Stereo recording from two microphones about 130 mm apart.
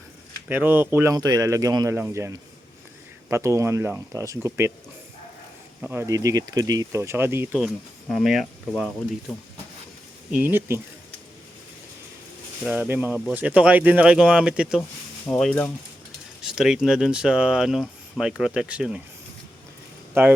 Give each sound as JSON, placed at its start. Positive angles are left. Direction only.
{"t": 0.4, "sound": "speech", "side_deg": -15}
{"t": 1.1, "sound": "speech", "side_deg": -30}
{"t": 5.9, "sound": "speech", "side_deg": -20}
{"t": 8.1, "sound": "speech", "side_deg": 0}
{"t": 10.3, "sound": "speech", "side_deg": -15}
{"t": 12.6, "sound": "speech", "side_deg": -10}
{"t": 15.3, "sound": "speech", "side_deg": 5}
{"t": 20.1, "sound": "speech", "side_deg": -20}